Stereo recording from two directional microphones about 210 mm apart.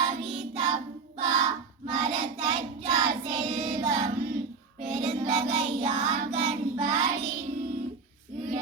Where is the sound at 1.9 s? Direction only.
30° right (ahead or behind).